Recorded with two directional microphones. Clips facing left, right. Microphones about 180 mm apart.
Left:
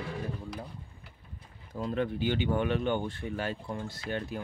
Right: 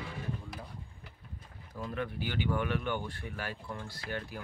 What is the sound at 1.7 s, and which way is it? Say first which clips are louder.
Speech: left 6 dB; 25° left (ahead or behind).